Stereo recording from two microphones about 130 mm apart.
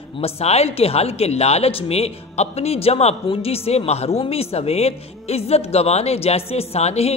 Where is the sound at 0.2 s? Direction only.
55° left (ahead or behind).